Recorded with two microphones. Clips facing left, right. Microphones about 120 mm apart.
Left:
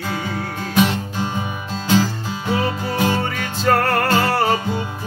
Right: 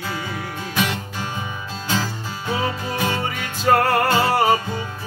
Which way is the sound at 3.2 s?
5° right (ahead or behind).